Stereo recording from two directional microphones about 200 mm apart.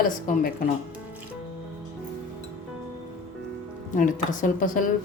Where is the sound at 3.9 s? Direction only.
40° left (ahead or behind).